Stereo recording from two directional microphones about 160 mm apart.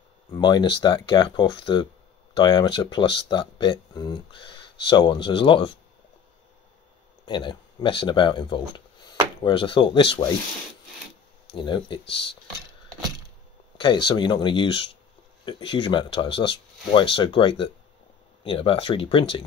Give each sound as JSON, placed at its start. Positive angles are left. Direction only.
{"t": 0.3, "sound": "speech", "side_deg": 25}
{"t": 7.2, "sound": "speech", "side_deg": 30}
{"t": 11.5, "sound": "speech", "side_deg": 30}
{"t": 13.7, "sound": "speech", "side_deg": 30}